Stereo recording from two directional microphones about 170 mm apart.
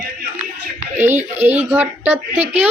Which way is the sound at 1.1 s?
40° right (ahead or behind).